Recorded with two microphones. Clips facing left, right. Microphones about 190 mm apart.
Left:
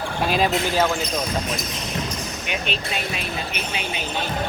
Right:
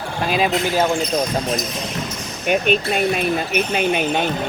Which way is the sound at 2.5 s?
50° right (ahead or behind).